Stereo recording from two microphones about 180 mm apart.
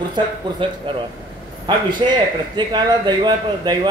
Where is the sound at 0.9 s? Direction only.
25° right (ahead or behind).